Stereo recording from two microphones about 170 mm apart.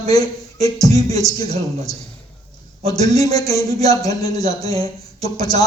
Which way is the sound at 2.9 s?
20° left (ahead or behind).